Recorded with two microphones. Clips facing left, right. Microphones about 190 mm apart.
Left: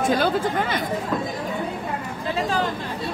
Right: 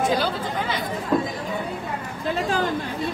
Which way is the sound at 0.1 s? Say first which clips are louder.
Left 3 dB; 50° left (ahead or behind).